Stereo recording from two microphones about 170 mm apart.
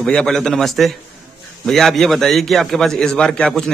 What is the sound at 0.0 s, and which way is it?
A man's voice, 5° left (ahead or behind).